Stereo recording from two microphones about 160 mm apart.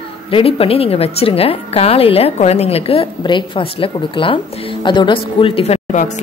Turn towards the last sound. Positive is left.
turn(degrees=45)  # may be behind; listen again after turning